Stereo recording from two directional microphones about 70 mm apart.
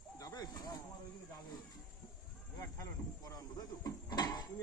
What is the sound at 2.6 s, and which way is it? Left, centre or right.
Speech, left.